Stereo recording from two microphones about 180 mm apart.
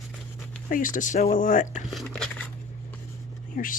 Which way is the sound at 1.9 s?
Centre (ahead or behind).